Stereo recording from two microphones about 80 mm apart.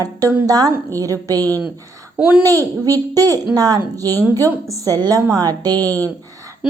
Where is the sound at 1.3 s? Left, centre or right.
Left.